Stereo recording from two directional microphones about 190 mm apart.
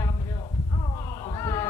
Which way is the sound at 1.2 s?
20° left (ahead or behind).